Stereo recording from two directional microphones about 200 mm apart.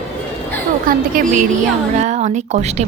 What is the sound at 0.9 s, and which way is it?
A woman's voice, 45° right (ahead or behind).